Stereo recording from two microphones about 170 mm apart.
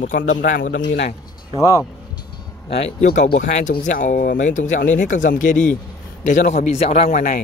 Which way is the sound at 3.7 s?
50° left (ahead or behind).